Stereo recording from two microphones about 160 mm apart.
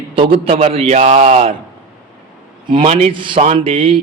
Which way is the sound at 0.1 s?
35° right (ahead or behind).